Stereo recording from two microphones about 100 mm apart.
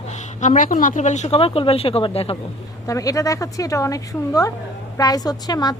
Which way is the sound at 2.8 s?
35° left (ahead or behind).